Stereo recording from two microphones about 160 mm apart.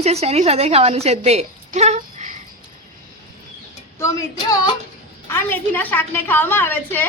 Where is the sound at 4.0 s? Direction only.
20° left (ahead or behind).